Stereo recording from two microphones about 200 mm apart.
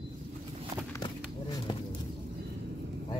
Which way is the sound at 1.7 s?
25° left (ahead or behind).